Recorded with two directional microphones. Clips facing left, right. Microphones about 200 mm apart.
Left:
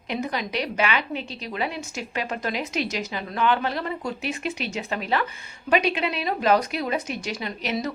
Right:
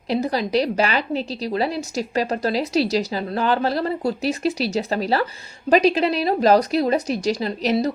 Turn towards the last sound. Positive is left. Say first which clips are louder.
# right 7 dB
turn(degrees=-35)  # may be behind; listen again after turning